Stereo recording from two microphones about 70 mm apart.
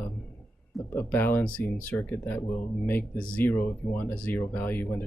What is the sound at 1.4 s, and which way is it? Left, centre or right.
Speech, centre.